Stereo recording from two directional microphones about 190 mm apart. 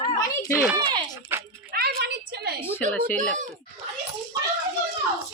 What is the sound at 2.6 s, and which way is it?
Speech, 10° left (ahead or behind).